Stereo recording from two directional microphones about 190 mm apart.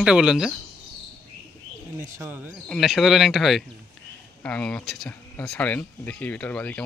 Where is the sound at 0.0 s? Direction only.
5° right (ahead or behind).